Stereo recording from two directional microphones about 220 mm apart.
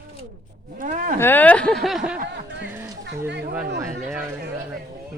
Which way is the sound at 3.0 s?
50° right (ahead or behind).